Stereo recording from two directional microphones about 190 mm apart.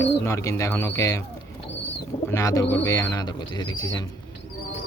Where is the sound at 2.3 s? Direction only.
15° left (ahead or behind).